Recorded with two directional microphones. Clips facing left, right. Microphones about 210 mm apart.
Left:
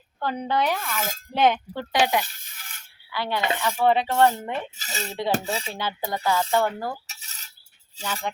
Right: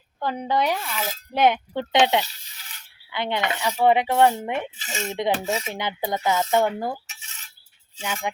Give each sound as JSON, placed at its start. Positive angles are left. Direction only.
{"t": 0.2, "sound": "speech", "side_deg": -15}
{"t": 0.9, "sound": "speech", "side_deg": 45}
{"t": 1.3, "sound": "speech", "side_deg": -15}
{"t": 2.2, "sound": "a sound", "side_deg": 50}
{"t": 3.1, "sound": "speech", "side_deg": -20}
{"t": 4.8, "sound": "dishes", "side_deg": 35}
{"t": 5.7, "sound": "speech", "side_deg": -20}
{"t": 7.1, "sound": "cutlery", "side_deg": 40}
{"t": 8.0, "sound": "speech", "side_deg": -10}